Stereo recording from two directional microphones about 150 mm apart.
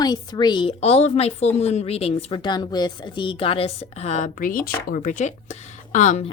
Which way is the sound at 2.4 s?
30° left (ahead or behind).